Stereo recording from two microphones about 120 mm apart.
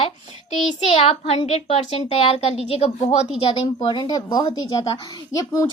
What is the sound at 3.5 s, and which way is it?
A child's voice, 45° left (ahead or behind).